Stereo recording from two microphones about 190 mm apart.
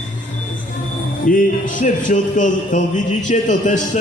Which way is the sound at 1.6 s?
40° left (ahead or behind).